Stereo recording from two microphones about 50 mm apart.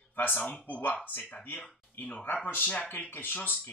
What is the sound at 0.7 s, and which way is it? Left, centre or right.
Speech, left.